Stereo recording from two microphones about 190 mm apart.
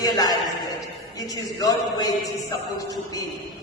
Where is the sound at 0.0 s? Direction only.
20° left (ahead or behind).